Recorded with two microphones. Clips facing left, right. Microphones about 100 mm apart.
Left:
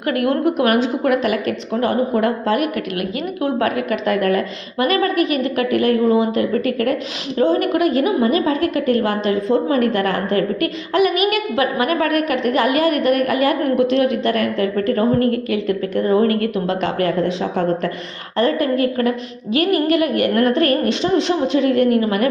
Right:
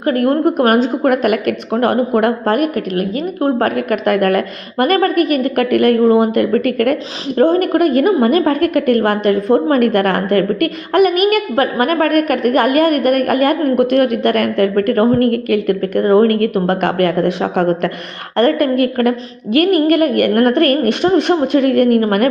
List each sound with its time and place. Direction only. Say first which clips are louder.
0.0 s a woman's voice: right 4 dB; 40° right (ahead or behind)